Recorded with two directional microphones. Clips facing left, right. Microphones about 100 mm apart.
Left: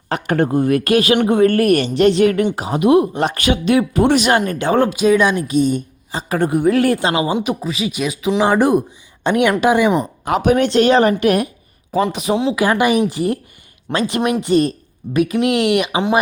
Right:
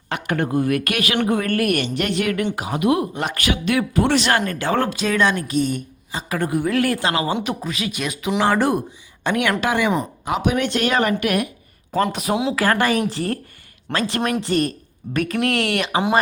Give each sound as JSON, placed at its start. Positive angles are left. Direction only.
{"t": 0.1, "sound": "speech", "side_deg": 35}
{"t": 6.1, "sound": "speech", "side_deg": 30}
{"t": 7.3, "sound": "speech", "side_deg": 5}
{"t": 8.4, "sound": "speech", "side_deg": 15}
{"t": 10.2, "sound": "speech", "side_deg": 45}
{"t": 11.9, "sound": "speech", "side_deg": 5}
{"t": 12.5, "sound": "speech", "side_deg": 15}
{"t": 14.4, "sound": "speech", "side_deg": 20}